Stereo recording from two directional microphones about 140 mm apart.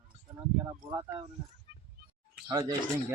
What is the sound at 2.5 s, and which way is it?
Speech, 30° right (ahead or behind).